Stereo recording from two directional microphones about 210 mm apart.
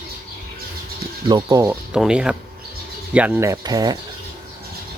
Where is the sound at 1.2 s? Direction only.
20° right (ahead or behind).